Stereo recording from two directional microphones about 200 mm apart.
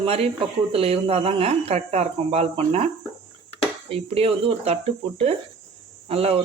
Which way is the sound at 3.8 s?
30° right (ahead or behind).